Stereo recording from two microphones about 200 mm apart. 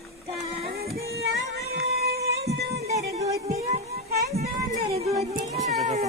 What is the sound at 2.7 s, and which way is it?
Music, 35° right (ahead or behind).